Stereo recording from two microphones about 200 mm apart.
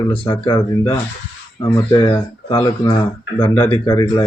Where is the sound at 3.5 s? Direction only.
10° left (ahead or behind).